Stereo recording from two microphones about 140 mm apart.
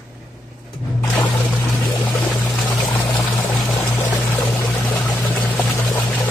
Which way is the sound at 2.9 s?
40° left (ahead or behind).